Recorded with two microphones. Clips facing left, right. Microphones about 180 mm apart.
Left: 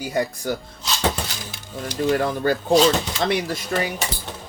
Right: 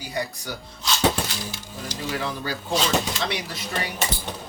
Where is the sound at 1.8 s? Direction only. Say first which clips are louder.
Left 9 dB; 55° left (ahead or behind).